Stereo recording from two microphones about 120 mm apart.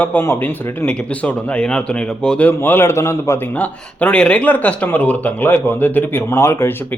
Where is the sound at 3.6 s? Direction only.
10° left (ahead or behind).